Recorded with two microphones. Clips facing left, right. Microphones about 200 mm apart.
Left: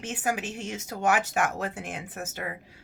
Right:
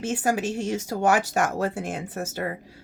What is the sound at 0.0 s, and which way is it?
A woman's voice, 40° right (ahead or behind).